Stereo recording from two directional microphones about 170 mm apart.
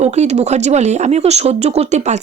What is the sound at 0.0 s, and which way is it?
Speech, 40° right (ahead or behind).